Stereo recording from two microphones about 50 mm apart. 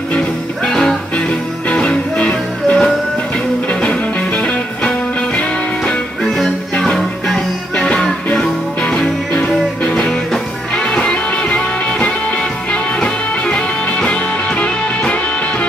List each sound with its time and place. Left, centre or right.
0.7 s music: centre
1.7 s music: left
4.4 s music: left
5.9 s music: centre